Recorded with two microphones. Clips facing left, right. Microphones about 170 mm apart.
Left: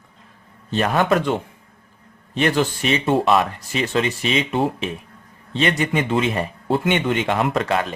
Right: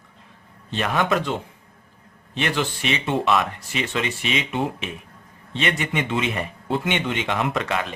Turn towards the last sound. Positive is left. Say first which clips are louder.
# left 4 dB
turn(degrees=40)  # may be behind; listen again after turning